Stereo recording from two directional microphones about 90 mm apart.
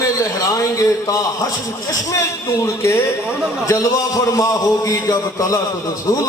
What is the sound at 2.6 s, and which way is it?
Speech, 30° left (ahead or behind).